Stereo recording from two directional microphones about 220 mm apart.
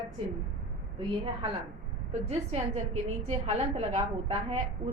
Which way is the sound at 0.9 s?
25° right (ahead or behind).